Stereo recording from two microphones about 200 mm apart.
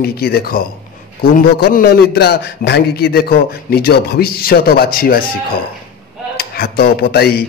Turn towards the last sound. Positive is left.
turn(degrees=50)  # may be behind; listen again after turning